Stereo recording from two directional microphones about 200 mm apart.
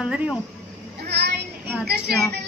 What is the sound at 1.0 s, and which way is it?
Child singing, 55° right (ahead or behind).